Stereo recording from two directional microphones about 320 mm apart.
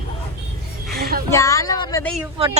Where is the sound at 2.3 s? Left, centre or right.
Centre.